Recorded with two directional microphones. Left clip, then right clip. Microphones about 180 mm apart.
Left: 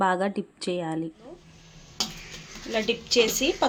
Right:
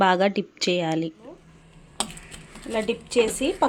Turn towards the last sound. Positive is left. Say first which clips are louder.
# even
turn(degrees=-10)  # may be behind; listen again after turning